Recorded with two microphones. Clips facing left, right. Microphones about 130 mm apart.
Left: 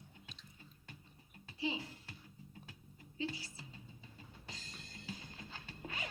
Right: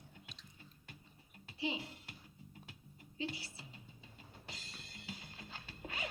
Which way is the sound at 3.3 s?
30° right (ahead or behind).